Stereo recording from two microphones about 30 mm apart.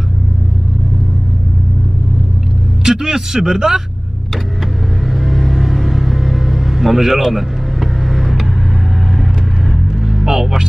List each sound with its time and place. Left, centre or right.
2.8 s speech: centre
5.0 s vehicle: centre
10.0 s vehicle: centre